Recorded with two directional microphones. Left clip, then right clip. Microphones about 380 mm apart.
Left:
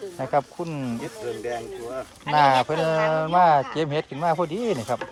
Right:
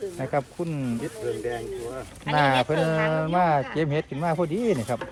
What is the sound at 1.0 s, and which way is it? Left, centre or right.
Speech, left.